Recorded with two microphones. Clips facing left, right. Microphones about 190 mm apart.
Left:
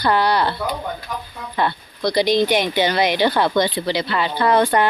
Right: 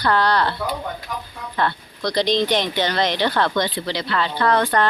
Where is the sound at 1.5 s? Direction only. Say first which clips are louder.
Left 1 dB; 10° left (ahead or behind).